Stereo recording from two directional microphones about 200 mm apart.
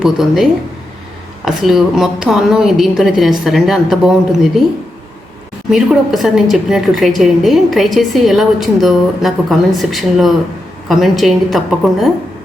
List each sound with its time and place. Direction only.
0.0 s a woman's voice: centre (ahead or behind)
1.5 s a woman's voice: centre (ahead or behind)
5.7 s a woman's voice: centre (ahead or behind)